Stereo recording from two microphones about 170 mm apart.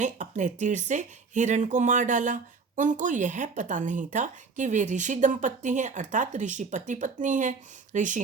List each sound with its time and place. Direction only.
0.0 s speech: 45° right (ahead or behind)